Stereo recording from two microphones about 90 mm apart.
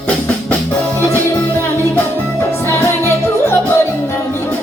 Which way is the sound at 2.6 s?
25° left (ahead or behind).